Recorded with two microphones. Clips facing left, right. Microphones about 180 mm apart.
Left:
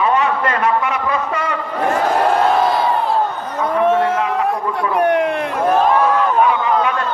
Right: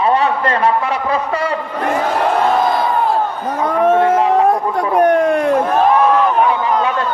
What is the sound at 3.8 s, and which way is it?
Crowd, 35° right (ahead or behind).